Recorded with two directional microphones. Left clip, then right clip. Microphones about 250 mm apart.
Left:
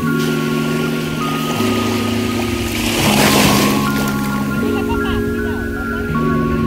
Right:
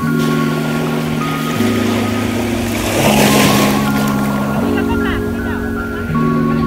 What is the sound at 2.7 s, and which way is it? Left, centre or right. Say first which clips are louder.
Boat: right 3 dB; centre.